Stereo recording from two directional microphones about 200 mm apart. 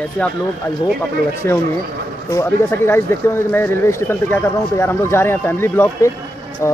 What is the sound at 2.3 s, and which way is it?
Speech, 15° left (ahead or behind).